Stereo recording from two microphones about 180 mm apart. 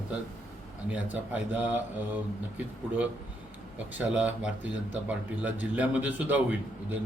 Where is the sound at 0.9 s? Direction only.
10° right (ahead or behind).